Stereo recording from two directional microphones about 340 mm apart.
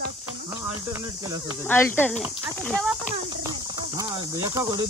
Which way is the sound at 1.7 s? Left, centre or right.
Centre.